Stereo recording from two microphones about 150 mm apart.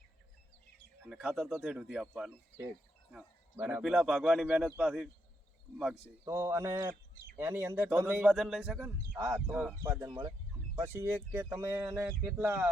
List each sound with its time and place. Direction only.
1.1 s speech: 5° right (ahead or behind)
3.5 s speech: 10° right (ahead or behind)
6.2 s speech: 20° right (ahead or behind)
9.1 s speech: 20° right (ahead or behind)
9.5 s speech: 5° right (ahead or behind)
9.8 s speech: 20° right (ahead or behind)